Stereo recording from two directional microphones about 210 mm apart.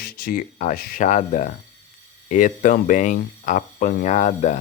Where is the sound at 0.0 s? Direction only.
45° left (ahead or behind).